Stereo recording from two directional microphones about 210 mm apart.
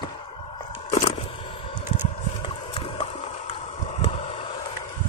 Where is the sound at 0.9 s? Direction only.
30° left (ahead or behind).